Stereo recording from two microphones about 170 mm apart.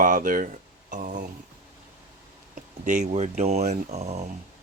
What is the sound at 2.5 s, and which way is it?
Speech, 45° right (ahead or behind).